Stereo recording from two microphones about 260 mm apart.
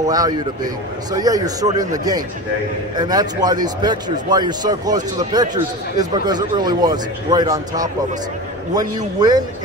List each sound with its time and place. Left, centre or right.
0.1 s speech: centre